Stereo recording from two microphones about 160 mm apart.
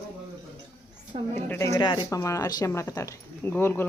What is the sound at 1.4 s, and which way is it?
A woman's voice, 20° left (ahead or behind).